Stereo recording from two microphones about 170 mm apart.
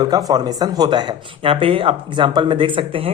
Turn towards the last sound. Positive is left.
turn(degrees=-30)  # may be behind; listen again after turning